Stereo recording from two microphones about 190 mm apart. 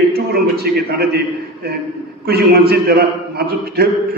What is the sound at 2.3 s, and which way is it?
A man's voice, 55° right (ahead or behind).